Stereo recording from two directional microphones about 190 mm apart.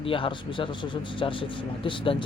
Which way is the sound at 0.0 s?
30° left (ahead or behind).